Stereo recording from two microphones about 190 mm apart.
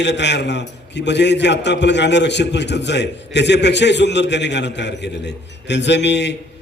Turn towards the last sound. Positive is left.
turn(degrees=65)  # may be behind; listen again after turning